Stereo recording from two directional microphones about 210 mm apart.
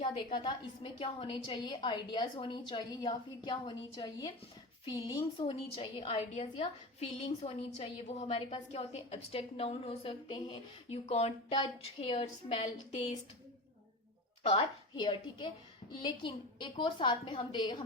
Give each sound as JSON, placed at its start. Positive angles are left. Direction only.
{"t": 0.0, "sound": "a woman's voice", "side_deg": 25}
{"t": 14.4, "sound": "a woman's voice", "side_deg": 25}